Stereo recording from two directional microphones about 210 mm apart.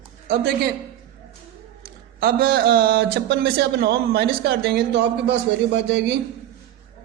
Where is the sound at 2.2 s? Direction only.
45° right (ahead or behind).